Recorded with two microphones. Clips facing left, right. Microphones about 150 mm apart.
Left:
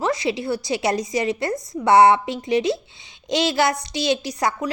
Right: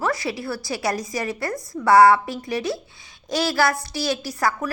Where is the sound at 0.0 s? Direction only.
20° left (ahead or behind).